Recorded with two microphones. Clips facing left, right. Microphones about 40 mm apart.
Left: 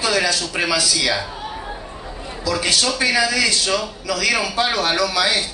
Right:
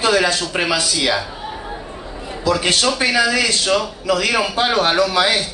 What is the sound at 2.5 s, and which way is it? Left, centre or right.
A man's voice, right.